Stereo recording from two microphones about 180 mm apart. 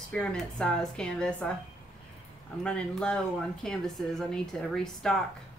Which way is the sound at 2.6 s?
5° left (ahead or behind).